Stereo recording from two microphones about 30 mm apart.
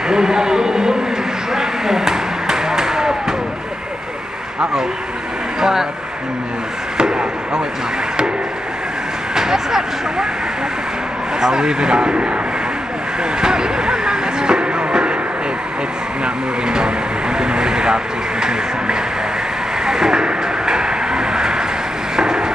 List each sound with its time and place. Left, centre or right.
0.1 s a man's voice: right
1.5 s a sound: centre
5.6 s speech: centre
7.0 s chop: right
9.3 s speech: centre
11.4 s a man's voice: right
13.4 s speech: right
16.6 s speech: right
19.9 s vehicle: right
22.1 s wood: right